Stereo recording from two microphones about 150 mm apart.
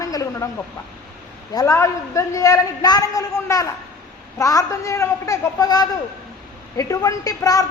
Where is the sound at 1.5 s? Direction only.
20° left (ahead or behind).